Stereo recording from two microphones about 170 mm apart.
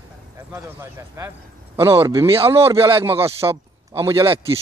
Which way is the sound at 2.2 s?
35° right (ahead or behind).